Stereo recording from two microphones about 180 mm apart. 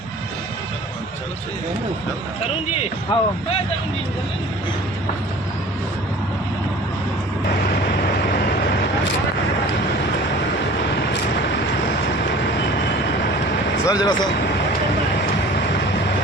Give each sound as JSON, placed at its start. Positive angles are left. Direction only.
{"t": 3.1, "sound": "speech", "side_deg": 25}
{"t": 13.8, "sound": "speech", "side_deg": 20}